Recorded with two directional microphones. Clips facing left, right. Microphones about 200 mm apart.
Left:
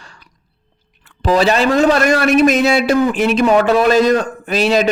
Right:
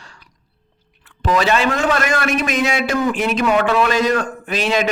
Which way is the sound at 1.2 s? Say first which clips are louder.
Left 4 dB; 35° left (ahead or behind).